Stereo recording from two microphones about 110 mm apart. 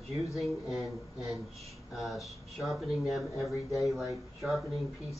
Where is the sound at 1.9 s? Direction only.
Centre (ahead or behind).